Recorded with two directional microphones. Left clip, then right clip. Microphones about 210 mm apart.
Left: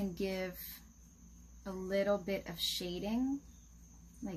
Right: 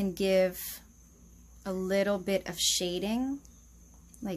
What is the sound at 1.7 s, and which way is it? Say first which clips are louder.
Speech: right 5 dB; 45° right (ahead or behind).